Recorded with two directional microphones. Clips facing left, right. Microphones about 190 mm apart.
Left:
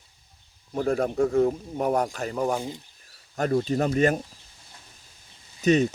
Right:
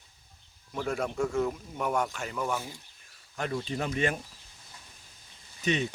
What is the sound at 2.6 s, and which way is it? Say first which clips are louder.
Speech: left 7 dB; 20° left (ahead or behind).